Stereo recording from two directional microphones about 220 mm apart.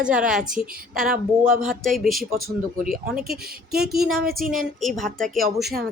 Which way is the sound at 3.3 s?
45° right (ahead or behind).